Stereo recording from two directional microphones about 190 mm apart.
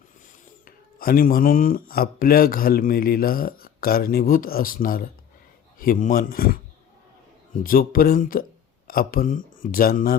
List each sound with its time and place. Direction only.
0.6 s speech: 50° left (ahead or behind)